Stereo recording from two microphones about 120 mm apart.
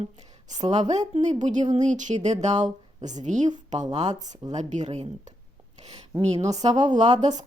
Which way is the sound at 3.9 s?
70° right (ahead or behind).